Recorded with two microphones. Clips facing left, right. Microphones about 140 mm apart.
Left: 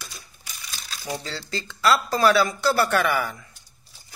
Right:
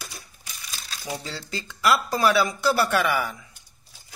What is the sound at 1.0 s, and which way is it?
Speech, 10° right (ahead or behind).